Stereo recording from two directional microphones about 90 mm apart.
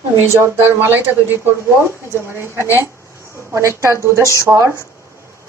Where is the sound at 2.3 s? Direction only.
30° right (ahead or behind).